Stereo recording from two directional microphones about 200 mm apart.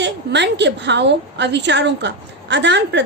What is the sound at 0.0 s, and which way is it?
A woman's voice, 60° right (ahead or behind).